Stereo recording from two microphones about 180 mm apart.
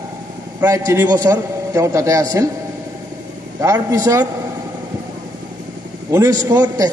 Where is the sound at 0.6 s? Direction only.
15° right (ahead or behind).